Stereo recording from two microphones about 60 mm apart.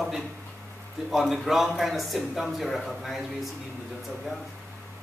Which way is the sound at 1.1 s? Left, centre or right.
Centre.